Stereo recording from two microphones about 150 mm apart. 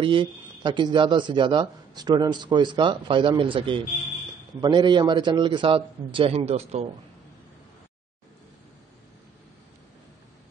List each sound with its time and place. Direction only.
0.0 s speech: 35° right (ahead or behind)